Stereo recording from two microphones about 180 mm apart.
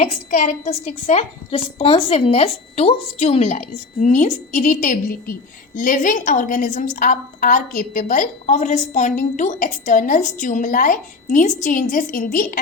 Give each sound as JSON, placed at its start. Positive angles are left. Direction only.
{"t": 0.0, "sound": "a woman's voice", "side_deg": 45}